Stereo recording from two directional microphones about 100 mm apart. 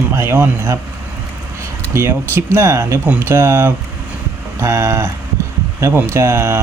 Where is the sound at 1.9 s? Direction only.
25° right (ahead or behind).